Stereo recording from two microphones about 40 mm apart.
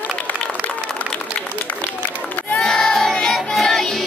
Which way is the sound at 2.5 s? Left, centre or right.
Centre.